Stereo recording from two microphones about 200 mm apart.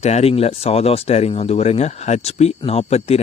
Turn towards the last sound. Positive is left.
turn(degrees=30)  # may be behind; listen again after turning